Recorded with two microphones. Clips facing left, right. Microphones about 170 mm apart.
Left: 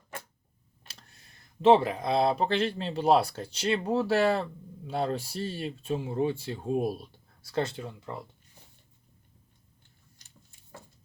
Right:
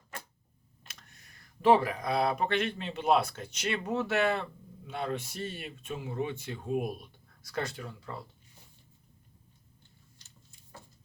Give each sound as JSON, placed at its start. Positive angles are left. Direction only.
{"t": 0.9, "sound": "speech", "side_deg": 30}